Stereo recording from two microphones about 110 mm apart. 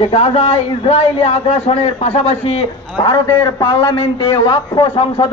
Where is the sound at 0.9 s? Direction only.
85° left; by 2.7 s 70° left (ahead or behind).